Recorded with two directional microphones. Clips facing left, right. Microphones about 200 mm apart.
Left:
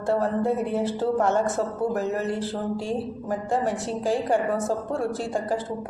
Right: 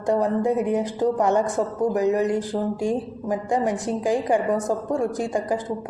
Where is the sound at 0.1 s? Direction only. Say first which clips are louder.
Right 3 dB; 15° right (ahead or behind).